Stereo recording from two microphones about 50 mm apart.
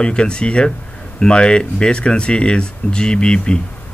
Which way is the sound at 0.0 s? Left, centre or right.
Centre.